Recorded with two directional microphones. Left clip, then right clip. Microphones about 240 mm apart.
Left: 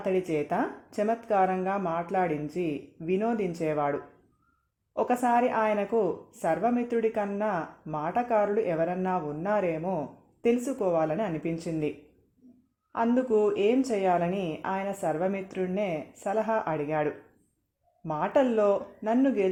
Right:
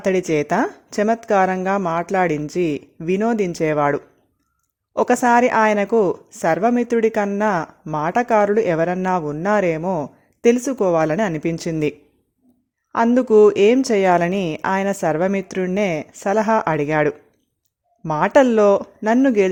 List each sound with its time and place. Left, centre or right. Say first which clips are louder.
0.0 s a woman's voice: right 9 dB; right